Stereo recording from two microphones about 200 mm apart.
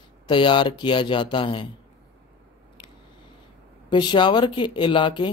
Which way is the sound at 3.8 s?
20° left (ahead or behind).